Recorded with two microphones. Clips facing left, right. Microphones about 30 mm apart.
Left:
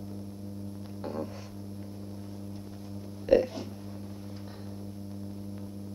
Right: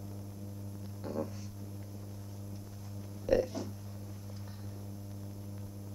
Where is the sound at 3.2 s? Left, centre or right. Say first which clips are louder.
Left 6 dB; left.